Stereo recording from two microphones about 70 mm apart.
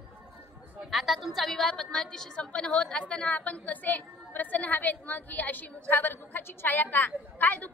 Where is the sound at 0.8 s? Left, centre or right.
Centre.